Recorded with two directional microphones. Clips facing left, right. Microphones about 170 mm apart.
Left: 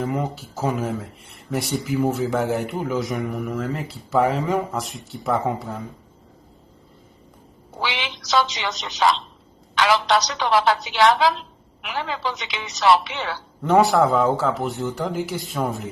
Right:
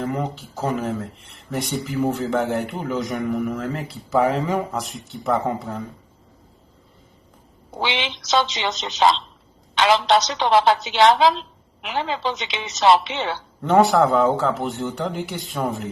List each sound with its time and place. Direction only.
0.0 s speech: 5° left (ahead or behind)
7.8 s a woman's voice: 25° right (ahead or behind)
13.6 s speech: centre (ahead or behind)